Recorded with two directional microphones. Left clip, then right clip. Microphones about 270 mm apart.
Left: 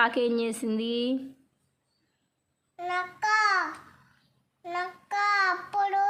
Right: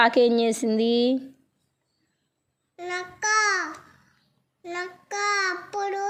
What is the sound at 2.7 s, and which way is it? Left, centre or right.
Child singing, left.